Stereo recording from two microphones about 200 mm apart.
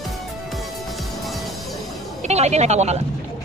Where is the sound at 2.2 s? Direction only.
35° right (ahead or behind).